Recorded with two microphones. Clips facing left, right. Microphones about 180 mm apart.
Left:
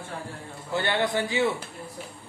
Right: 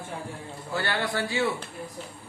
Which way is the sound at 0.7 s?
20° left (ahead or behind).